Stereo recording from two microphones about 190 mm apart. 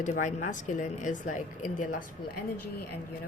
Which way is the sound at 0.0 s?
40° left (ahead or behind).